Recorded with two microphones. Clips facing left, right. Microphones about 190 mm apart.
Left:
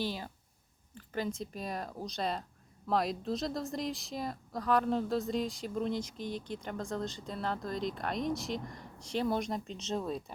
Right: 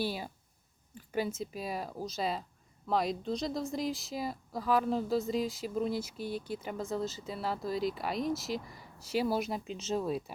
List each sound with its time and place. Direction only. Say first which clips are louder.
0.0 s speech: right 2 dB; 10° right (ahead or behind)